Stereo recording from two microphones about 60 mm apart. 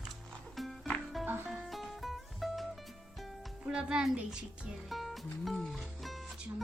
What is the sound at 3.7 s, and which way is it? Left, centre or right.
A child's voice, centre.